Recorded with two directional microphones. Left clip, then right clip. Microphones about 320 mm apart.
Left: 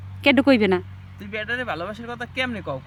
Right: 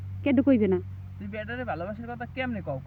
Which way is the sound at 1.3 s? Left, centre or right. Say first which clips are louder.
Left 7 dB; right.